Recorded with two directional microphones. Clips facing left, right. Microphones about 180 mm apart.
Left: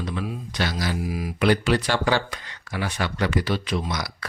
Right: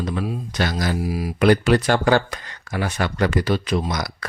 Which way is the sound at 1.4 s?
50° right (ahead or behind).